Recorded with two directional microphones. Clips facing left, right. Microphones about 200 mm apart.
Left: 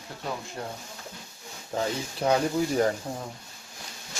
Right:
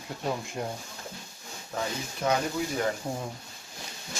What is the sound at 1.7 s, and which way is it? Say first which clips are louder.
Speech: left 4 dB; 30° left (ahead or behind).